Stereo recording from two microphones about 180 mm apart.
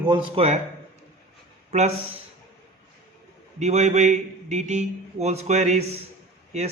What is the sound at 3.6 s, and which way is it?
A man's voice, 40° right (ahead or behind).